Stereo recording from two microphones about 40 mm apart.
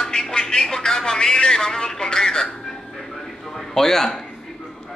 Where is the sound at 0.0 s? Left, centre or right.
Centre.